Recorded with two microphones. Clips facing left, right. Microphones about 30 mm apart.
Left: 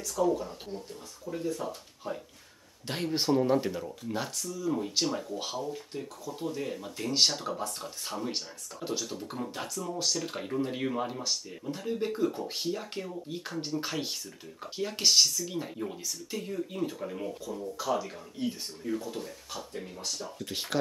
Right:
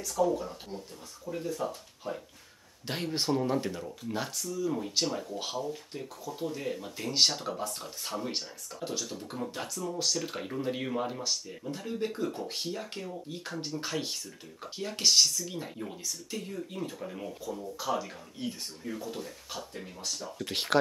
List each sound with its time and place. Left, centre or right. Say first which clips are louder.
0.2 s speech: even; centre
8.8 s speech: left 2 dB; centre
20.3 s speech: right 3 dB; right